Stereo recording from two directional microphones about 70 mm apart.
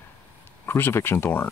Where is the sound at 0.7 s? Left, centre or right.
Left.